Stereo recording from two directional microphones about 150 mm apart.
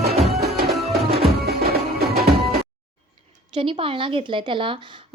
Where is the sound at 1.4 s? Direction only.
90° right.